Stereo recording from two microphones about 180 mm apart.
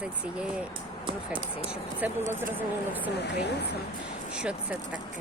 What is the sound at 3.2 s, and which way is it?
Speech, 70° left (ahead or behind).